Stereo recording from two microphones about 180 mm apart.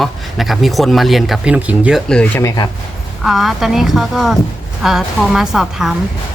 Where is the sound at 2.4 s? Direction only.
15° left (ahead or behind).